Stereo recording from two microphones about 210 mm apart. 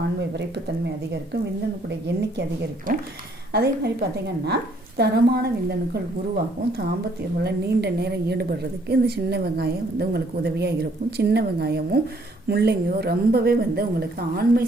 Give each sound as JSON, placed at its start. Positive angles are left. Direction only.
{"t": 0.2, "sound": "speech", "side_deg": -55}
{"t": 1.9, "sound": "a woman's voice", "side_deg": -55}
{"t": 2.9, "sound": "a woman's voice", "side_deg": -40}